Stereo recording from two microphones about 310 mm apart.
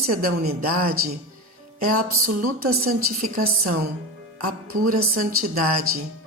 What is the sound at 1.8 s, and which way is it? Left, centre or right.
Music, right.